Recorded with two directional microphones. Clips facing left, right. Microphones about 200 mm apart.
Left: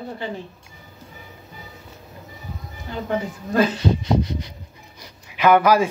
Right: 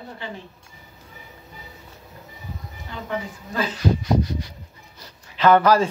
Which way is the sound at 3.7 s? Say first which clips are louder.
Left 1 dB; 25° left (ahead or behind).